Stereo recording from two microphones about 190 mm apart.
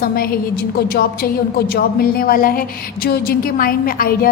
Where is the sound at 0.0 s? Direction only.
50° left (ahead or behind).